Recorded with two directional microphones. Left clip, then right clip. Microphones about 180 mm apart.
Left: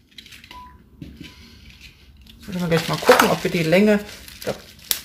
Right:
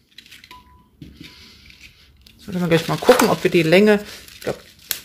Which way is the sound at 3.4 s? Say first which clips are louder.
Right 4 dB; 55° right (ahead or behind).